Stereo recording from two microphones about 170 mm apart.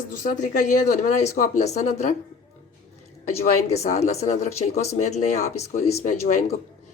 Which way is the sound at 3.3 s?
40° left (ahead or behind).